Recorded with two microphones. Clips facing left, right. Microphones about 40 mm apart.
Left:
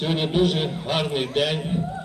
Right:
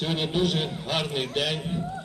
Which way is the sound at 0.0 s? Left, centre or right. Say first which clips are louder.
Left 4 dB; centre.